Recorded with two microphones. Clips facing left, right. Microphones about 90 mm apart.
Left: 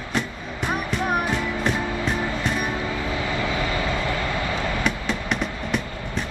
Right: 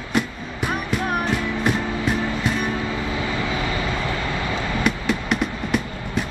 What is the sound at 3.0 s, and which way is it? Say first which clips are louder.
Vehicle: right 1 dB; 20° right (ahead or behind).